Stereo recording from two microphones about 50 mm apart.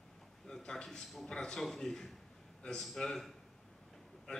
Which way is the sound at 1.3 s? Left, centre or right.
Centre.